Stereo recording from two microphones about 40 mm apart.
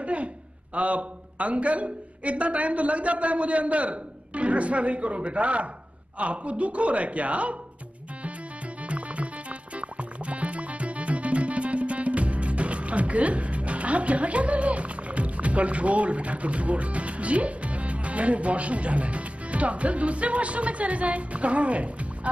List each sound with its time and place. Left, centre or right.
0.0 s a sound: right
0.7 s a man's voice: right
8.8 s music: right